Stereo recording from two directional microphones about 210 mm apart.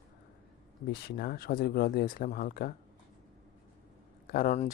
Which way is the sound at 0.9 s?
50° left (ahead or behind).